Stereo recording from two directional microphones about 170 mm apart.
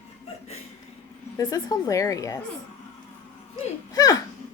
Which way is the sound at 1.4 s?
20° left (ahead or behind).